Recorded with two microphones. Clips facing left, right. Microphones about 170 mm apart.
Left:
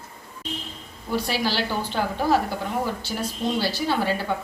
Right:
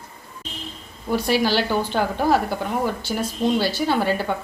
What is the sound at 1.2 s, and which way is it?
Speech, 55° right (ahead or behind).